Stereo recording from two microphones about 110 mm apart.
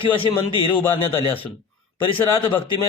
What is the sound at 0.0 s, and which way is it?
Speech, 50° left (ahead or behind).